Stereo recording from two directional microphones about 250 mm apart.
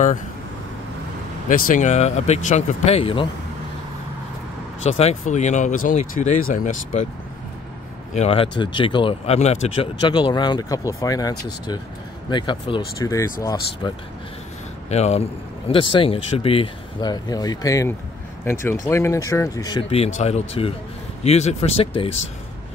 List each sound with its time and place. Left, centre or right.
1.5 s speech: left
4.9 s speech: left
8.1 s speech: left
14.9 s speech: left